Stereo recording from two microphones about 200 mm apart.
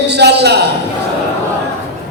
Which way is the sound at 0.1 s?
55° right (ahead or behind).